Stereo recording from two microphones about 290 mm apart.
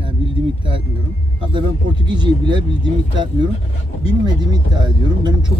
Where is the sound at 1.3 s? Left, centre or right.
Centre.